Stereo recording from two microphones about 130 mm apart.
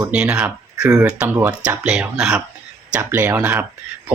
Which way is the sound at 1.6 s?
10° right (ahead or behind).